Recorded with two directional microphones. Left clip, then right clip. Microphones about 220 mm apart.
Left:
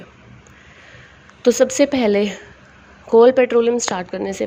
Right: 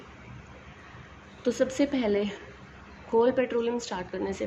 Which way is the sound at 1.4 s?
40° left (ahead or behind).